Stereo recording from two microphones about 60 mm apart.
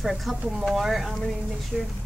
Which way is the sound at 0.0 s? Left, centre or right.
Centre.